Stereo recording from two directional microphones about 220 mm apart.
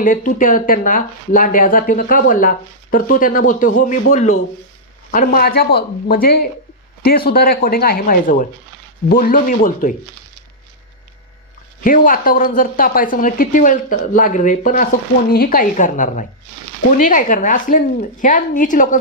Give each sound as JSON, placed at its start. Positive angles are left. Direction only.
{"t": 0.0, "sound": "speech", "side_deg": 35}
{"t": 11.8, "sound": "speech", "side_deg": 35}